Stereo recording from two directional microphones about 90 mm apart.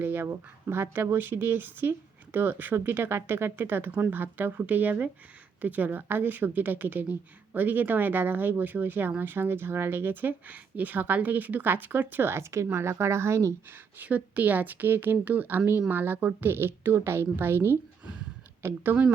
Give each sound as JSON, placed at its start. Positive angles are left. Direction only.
{"t": 0.0, "sound": "a woman's voice", "side_deg": -25}
{"t": 14.0, "sound": "a woman's voice", "side_deg": -20}